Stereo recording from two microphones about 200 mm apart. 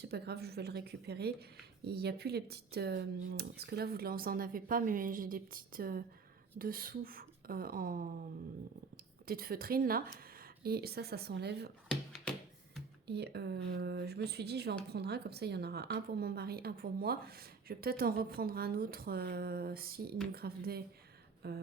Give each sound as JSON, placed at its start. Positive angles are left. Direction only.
{"t": 0.0, "sound": "a woman's voice", "side_deg": -55}
{"t": 9.2, "sound": "a woman's voice", "side_deg": -50}
{"t": 13.1, "sound": "a woman's voice", "side_deg": -55}